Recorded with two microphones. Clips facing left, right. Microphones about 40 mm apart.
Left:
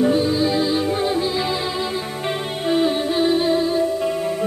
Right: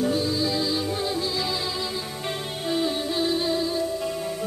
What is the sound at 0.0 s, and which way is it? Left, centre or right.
Music, left.